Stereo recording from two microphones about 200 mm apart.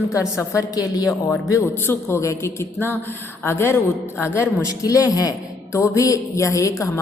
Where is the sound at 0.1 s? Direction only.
15° left (ahead or behind).